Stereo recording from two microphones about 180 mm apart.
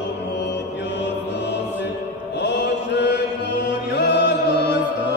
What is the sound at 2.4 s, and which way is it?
Chant, 70° left (ahead or behind).